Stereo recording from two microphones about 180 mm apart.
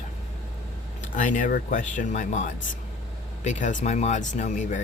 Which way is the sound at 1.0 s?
45° left (ahead or behind).